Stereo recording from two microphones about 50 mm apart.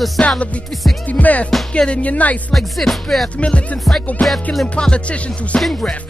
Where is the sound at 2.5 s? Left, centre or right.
Centre.